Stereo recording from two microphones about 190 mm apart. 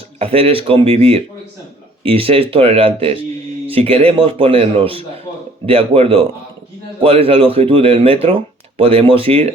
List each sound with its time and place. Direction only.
0.2 s speech: 30° right (ahead or behind)